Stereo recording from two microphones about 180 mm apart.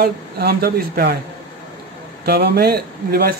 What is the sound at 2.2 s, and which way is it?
Speech, 65° right (ahead or behind).